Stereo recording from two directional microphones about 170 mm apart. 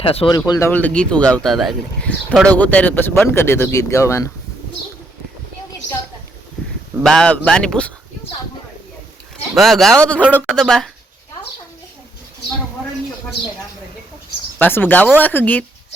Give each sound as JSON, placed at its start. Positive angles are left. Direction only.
{"t": 0.0, "sound": "speech", "side_deg": 35}
{"t": 0.3, "sound": "speech", "side_deg": 20}
{"t": 0.7, "sound": "speech", "side_deg": 10}
{"t": 7.0, "sound": "speech", "side_deg": 5}
{"t": 9.6, "sound": "speech", "side_deg": 0}
{"t": 10.2, "sound": "speech", "side_deg": -5}
{"t": 14.6, "sound": "speech", "side_deg": 10}